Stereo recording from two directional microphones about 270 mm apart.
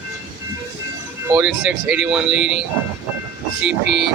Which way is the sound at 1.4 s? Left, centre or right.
Centre.